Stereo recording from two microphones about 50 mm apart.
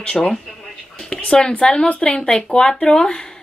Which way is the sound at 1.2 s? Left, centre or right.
Centre.